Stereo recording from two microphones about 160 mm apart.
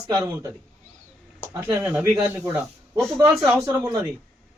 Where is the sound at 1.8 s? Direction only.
10° right (ahead or behind).